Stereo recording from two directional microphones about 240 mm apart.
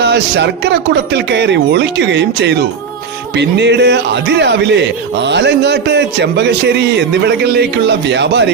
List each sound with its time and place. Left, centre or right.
0.0 s a man's voice: right